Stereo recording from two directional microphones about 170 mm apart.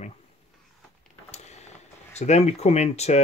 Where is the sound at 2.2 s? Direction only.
40° left (ahead or behind).